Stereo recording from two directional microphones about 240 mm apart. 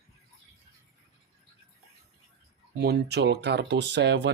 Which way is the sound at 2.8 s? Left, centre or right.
Right.